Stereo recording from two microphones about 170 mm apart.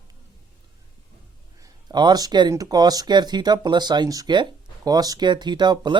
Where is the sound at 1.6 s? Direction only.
25° right (ahead or behind).